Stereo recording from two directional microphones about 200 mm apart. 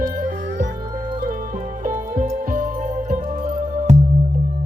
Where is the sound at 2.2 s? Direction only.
40° right (ahead or behind).